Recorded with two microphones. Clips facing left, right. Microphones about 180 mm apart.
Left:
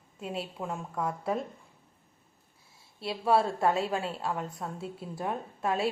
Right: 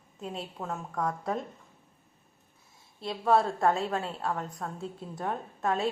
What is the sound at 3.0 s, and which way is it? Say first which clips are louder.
A woman's voice: right 1 dB; 5° left (ahead or behind).